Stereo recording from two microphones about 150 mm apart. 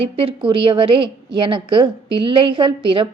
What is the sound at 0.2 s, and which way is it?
A woman's voice, 35° right (ahead or behind).